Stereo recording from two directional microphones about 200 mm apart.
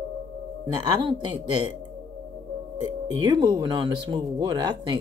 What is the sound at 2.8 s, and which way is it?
Speech, 20° right (ahead or behind).